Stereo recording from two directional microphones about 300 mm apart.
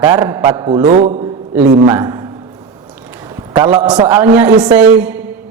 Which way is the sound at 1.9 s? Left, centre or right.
Centre.